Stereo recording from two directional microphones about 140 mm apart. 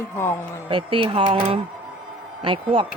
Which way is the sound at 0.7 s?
40° right (ahead or behind).